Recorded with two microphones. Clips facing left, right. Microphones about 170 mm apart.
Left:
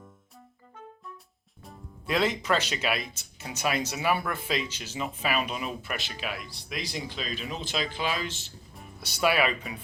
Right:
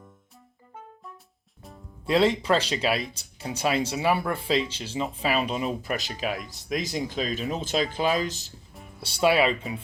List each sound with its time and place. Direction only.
2.0 s speech: 30° right (ahead or behind)